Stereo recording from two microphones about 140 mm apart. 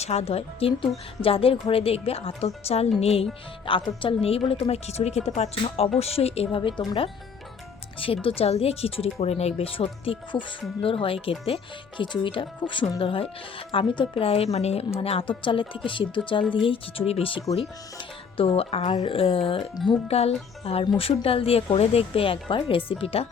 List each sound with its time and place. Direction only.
0.0 s a woman's voice: 50° left (ahead or behind)